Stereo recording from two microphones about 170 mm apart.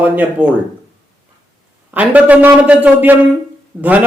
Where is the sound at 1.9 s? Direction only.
10° right (ahead or behind).